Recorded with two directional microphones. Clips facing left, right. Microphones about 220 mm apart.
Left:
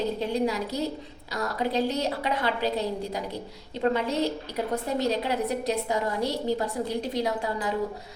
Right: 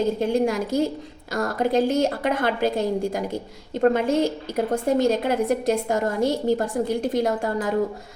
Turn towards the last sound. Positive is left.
turn(degrees=-50)  # may be behind; listen again after turning